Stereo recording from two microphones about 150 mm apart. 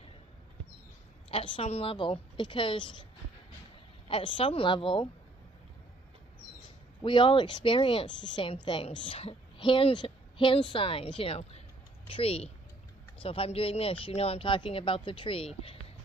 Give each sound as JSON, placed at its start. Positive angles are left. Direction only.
{"t": 1.3, "sound": "a woman's voice", "side_deg": 40}
{"t": 4.1, "sound": "a woman's voice", "side_deg": 35}
{"t": 7.0, "sound": "a woman's voice", "side_deg": 35}